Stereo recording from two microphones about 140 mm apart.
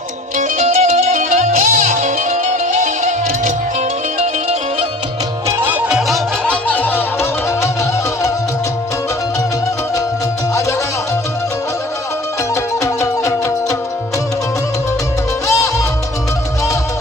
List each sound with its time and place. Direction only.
0.3 s music: 55° right (ahead or behind)
5.5 s music: 15° right (ahead or behind); by 7.7 s 15° left (ahead or behind)
12.8 s music: 20° left (ahead or behind)
15.4 s music: 25° left (ahead or behind)